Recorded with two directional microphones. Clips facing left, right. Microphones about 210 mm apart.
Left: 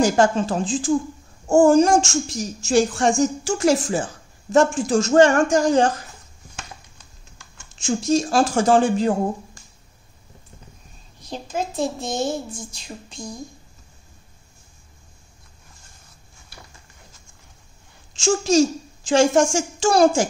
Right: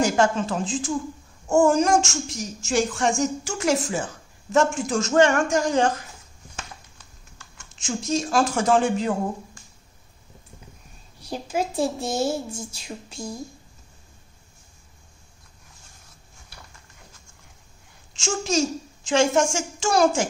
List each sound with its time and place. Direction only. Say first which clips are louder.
0.0 s a woman's voice: left 3 dB; 35° left (ahead or behind)
8.1 s a woman's voice: left 3 dB; 30° left (ahead or behind)
11.1 s speech: right 1 dB; 10° right (ahead or behind)
18.1 s a child's voice: left 7 dB; 35° left (ahead or behind)